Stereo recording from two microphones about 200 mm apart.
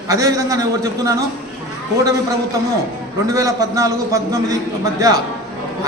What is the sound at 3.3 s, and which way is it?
A man's voice, 15° right (ahead or behind).